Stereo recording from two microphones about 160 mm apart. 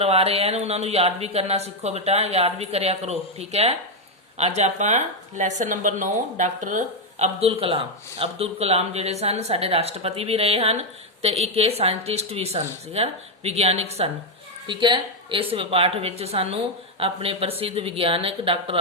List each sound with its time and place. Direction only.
0.0 s speech: 40° right (ahead or behind)
14.7 s speech: 30° right (ahead or behind)